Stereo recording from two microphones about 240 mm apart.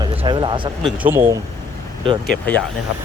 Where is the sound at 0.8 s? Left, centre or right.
Centre.